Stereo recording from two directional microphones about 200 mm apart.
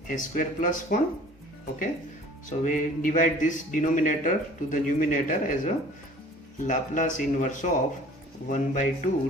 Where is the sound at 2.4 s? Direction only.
40° left (ahead or behind).